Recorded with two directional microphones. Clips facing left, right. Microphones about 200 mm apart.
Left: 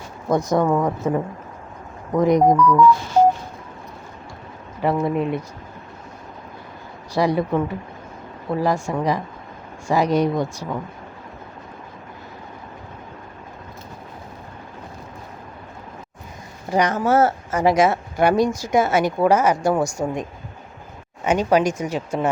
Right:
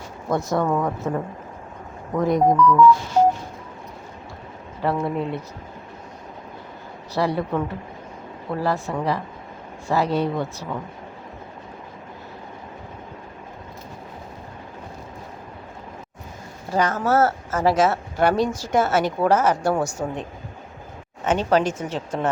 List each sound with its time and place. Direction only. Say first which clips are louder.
0.3 s speech: left 3 dB; 15° left (ahead or behind)
4.8 s speech: left 3 dB; 15° left (ahead or behind)
7.1 s speech: left 3 dB; 15° left (ahead or behind)
16.6 s speech: left 2 dB; 15° left (ahead or behind)
21.2 s speech: left 2 dB; 10° left (ahead or behind)